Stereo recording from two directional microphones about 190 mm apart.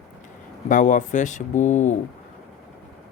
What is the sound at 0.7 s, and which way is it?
Speech, 40° left (ahead or behind).